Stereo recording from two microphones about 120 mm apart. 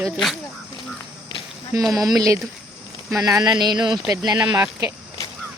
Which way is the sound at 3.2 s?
30° right (ahead or behind).